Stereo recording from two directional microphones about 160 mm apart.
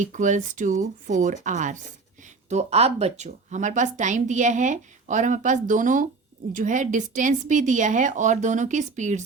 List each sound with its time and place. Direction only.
0.0 s speech: 50° right (ahead or behind)